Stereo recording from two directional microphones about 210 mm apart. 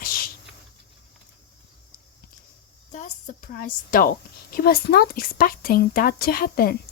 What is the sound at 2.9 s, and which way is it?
A woman's voice, 35° left (ahead or behind).